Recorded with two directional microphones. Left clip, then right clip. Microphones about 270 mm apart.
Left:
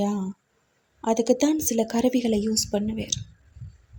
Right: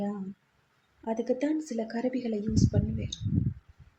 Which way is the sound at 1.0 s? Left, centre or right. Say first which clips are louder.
Left 8 dB; left.